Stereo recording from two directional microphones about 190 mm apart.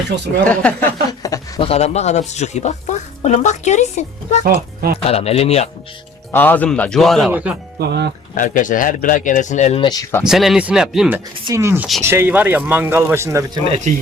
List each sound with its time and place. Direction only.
0.4 s a man's voice: 5° left (ahead or behind)
1.2 s a sound: 20° left (ahead or behind)
1.6 s speech: 35° left (ahead or behind)
4.4 s speech: 55° right (ahead or behind)
5.0 s speech: 35° left (ahead or behind)
6.3 s a man's voice: 10° left (ahead or behind); by 7.5 s 10° right (ahead or behind)
7.8 s speech: 60° right (ahead or behind)
8.4 s speech: 45° left (ahead or behind); by 10.2 s 15° left (ahead or behind)
10.2 s speech: centre (ahead or behind)
11.4 s speech: 15° right (ahead or behind)
13.7 s speech: 35° right (ahead or behind)